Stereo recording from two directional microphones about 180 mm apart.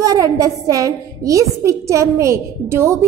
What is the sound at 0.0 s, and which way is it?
A woman's voice, 20° right (ahead or behind).